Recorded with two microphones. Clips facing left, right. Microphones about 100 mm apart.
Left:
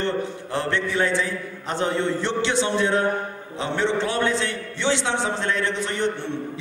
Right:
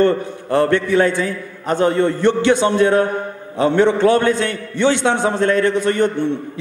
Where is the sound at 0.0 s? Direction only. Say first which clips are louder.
Right 9 dB; 55° right (ahead or behind).